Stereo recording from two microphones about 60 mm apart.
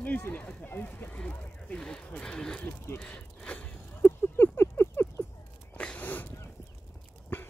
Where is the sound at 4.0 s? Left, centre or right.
Left.